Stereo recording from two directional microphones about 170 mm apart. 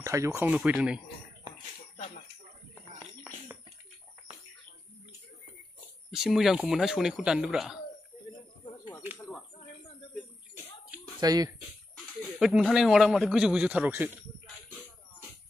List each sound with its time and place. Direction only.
0.0 s speech: 15° right (ahead or behind)
0.7 s speech: 5° right (ahead or behind)
6.0 s speech: centre (ahead or behind)
11.1 s speech: 20° right (ahead or behind)
12.4 s speech: centre (ahead or behind)